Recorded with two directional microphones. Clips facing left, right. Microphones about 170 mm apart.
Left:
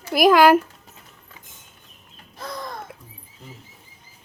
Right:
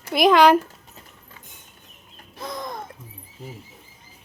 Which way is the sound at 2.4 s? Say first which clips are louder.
Right 1 dB; 20° right (ahead or behind).